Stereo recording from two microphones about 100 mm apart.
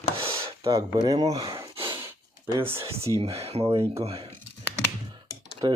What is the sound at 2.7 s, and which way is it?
Speech, 30° right (ahead or behind).